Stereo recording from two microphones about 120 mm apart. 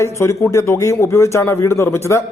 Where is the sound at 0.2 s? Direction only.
20° left (ahead or behind).